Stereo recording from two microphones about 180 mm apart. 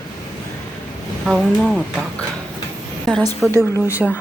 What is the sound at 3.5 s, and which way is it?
Speech, 15° left (ahead or behind).